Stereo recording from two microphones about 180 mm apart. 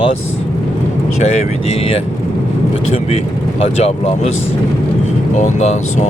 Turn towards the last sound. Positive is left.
turn(degrees=40)  # may be behind; listen again after turning